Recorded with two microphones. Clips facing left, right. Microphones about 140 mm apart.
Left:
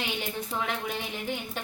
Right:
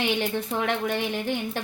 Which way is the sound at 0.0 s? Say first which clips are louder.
Right 7 dB; 75° right (ahead or behind).